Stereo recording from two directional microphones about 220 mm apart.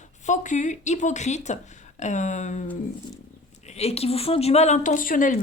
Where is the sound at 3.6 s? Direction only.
30° left (ahead or behind).